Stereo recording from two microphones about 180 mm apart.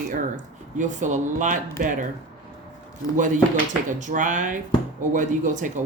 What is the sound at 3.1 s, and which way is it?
Speech, 45° right (ahead or behind).